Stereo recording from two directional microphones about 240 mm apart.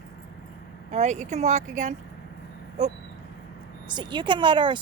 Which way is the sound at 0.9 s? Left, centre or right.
Right.